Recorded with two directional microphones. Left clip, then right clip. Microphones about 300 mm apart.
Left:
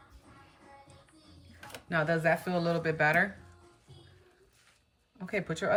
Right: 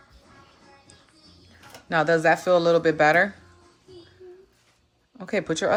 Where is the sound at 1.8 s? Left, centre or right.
Centre.